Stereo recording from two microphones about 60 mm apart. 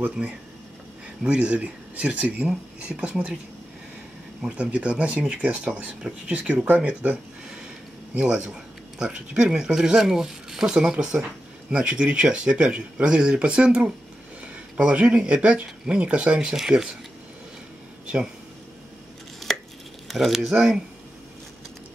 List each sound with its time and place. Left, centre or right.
0.2 s speech: centre
4.5 s speech: centre
8.2 s speech: centre
18.0 s speech: centre
19.4 s chopping: centre
20.1 s speech: centre